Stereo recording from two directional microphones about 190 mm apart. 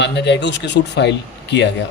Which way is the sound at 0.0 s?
65° left (ahead or behind).